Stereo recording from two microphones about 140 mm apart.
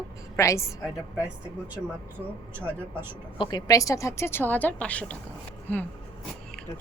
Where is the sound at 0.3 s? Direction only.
20° left (ahead or behind).